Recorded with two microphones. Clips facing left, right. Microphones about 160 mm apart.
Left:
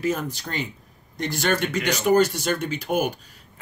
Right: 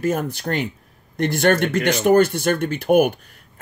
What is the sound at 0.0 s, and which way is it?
Speech, 55° right (ahead or behind).